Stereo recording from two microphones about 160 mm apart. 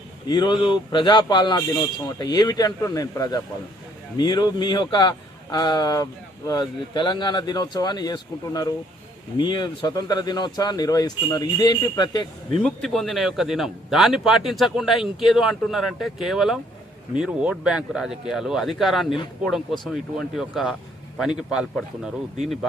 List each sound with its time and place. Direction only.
0.3 s speech: 30° left (ahead or behind)
12.6 s a man's voice: centre (ahead or behind)